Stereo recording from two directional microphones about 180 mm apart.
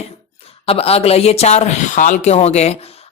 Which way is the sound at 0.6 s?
30° left (ahead or behind).